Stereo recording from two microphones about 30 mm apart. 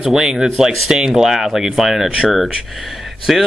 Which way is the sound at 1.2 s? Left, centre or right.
Centre.